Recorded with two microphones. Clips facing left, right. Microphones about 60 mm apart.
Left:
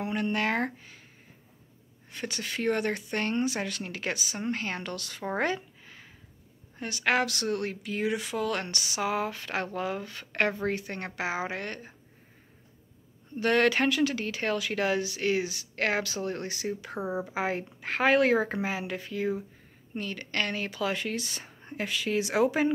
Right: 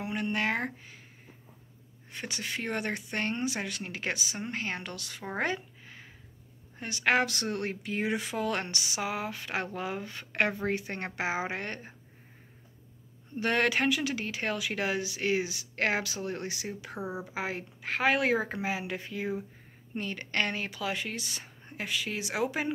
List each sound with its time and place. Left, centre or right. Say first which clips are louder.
0.0 s speech: left 2 dB; centre
2.1 s speech: left 2 dB; centre
5.4 s a sound: even; centre
6.8 s speech: even; right
13.4 s speech: left 3 dB; centre
16.6 s speech: left 4 dB; centre